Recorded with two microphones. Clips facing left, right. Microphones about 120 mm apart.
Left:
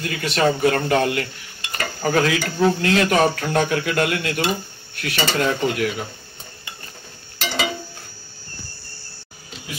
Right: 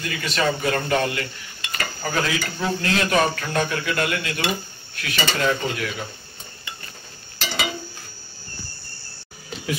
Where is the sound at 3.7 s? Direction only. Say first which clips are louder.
Left 4 dB; 55° left (ahead or behind).